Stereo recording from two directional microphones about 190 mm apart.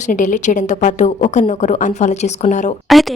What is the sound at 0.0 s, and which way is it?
A woman's voice, 40° left (ahead or behind).